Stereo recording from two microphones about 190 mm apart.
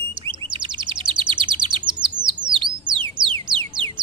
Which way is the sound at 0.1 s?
25° right (ahead or behind).